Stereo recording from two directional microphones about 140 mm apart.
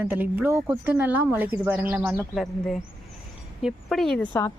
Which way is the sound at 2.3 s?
Centre (ahead or behind).